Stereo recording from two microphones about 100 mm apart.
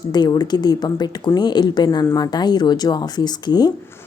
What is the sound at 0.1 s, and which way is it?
A woman's voice, 45° left (ahead or behind).